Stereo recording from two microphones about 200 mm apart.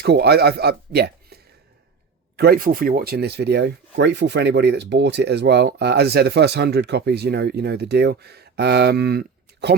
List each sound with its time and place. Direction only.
0.0 s speech: 55° right (ahead or behind)